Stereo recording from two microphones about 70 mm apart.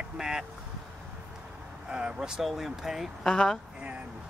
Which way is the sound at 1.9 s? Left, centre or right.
Centre.